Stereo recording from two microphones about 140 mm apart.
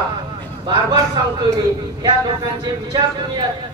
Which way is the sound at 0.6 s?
35° right (ahead or behind).